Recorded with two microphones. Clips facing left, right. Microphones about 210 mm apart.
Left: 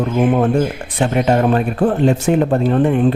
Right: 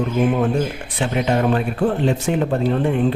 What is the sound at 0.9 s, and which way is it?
A man's voice, 45° left (ahead or behind).